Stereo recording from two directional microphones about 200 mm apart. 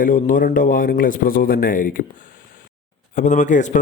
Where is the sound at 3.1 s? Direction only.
35° left (ahead or behind).